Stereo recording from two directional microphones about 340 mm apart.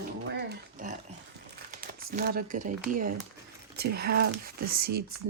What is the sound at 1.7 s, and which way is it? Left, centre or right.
Speech, right.